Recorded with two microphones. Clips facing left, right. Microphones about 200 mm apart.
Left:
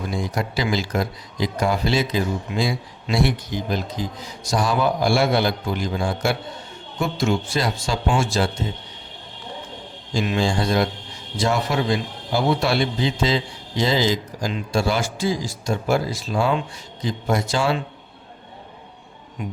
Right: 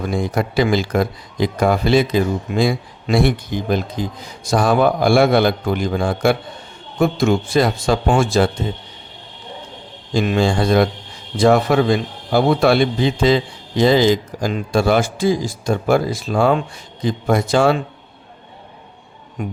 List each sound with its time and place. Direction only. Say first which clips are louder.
0.1 s a man's voice: right 6 dB; 55° right (ahead or behind)
10.2 s a man's voice: right 5 dB; 55° right (ahead or behind)
19.4 s speech: right 5 dB; 50° right (ahead or behind)